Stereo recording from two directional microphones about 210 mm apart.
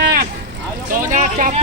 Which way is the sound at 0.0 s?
45° right (ahead or behind).